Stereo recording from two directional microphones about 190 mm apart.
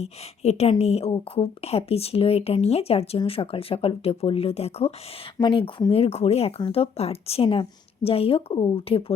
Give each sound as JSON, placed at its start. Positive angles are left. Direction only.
{"t": 0.0, "sound": "speech", "side_deg": 35}